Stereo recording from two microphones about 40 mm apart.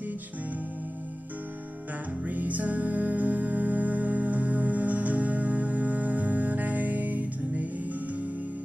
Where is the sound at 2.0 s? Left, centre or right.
Right.